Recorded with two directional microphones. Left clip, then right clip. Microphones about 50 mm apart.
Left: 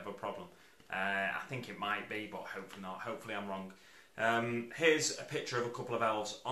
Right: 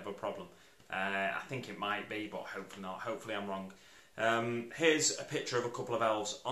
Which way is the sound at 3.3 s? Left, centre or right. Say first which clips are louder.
Right 2 dB; centre.